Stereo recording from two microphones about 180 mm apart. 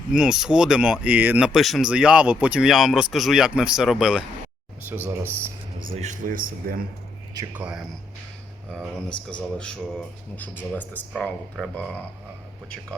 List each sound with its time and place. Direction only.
0.1 s speech: centre (ahead or behind)
5.9 s speech: 40° right (ahead or behind)
7.3 s speech: 10° right (ahead or behind)
9.3 s speech: 5° left (ahead or behind)